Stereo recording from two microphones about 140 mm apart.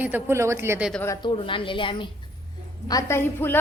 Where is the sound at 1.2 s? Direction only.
40° left (ahead or behind).